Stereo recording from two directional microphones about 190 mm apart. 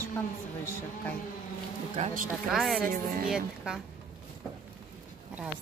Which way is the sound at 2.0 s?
35° right (ahead or behind).